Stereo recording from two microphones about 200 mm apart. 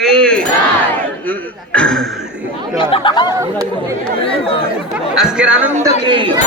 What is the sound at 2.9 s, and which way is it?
Speech, 25° left (ahead or behind).